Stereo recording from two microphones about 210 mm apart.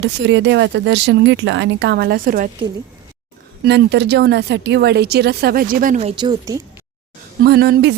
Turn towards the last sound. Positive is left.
turn(degrees=-50)  # may be behind; listen again after turning